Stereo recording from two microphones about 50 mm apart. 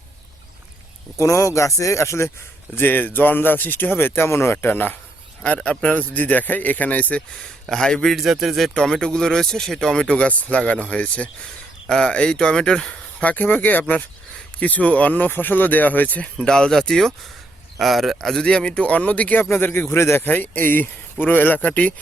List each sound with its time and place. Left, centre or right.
1.1 s speech: left
2.7 s speech: left
4.5 s speech: left
7.7 s speech: centre
8.1 s speech: centre
8.7 s speech: centre
13.2 s speech: left
16.4 s speech: centre
18.4 s speech: centre
19.4 s speech: left
20.2 s speech: left